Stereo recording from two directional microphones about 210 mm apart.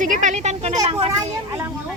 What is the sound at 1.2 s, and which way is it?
Speech, 15° right (ahead or behind).